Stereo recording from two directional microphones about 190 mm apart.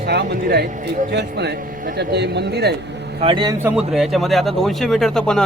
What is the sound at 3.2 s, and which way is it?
Speech, 25° right (ahead or behind).